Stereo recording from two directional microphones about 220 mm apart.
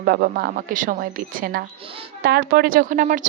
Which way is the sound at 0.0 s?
45° right (ahead or behind).